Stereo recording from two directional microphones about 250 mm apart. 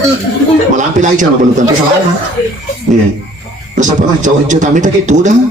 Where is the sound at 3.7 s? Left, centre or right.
Right.